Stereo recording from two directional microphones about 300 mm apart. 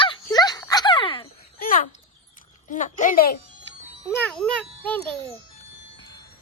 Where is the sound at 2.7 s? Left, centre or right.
Left.